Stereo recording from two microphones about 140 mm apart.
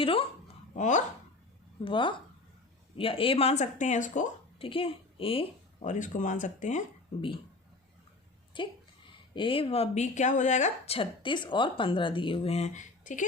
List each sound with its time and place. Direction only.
0.0 s speech: 40° left (ahead or behind)
0.7 s speech: 65° left (ahead or behind)
1.8 s speech: 35° left (ahead or behind); by 4.3 s 65° left (ahead or behind)
4.6 s speech: 40° left (ahead or behind)
5.8 s speech: 65° left (ahead or behind)
8.6 s speech: 35° left (ahead or behind); by 10.9 s 60° left (ahead or behind)
10.9 s speech: 35° left (ahead or behind); by 13.2 s 60° left (ahead or behind)